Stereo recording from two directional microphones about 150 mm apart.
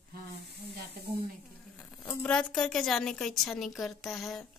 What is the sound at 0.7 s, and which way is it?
Speech, 80° right.